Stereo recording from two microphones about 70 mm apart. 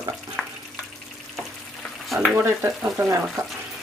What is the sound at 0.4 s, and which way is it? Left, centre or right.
Water tap, centre.